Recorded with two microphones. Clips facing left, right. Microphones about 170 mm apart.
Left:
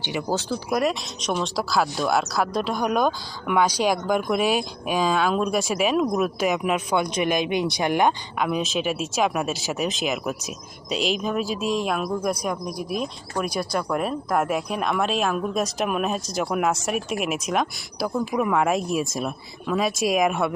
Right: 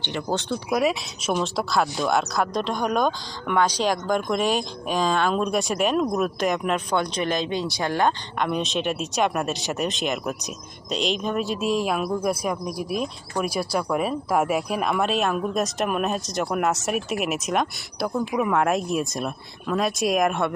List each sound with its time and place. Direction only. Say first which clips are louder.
0.0 s speech: left 1 dB; 10° left (ahead or behind)
8.4 s speech: left 1 dB; 5° left (ahead or behind)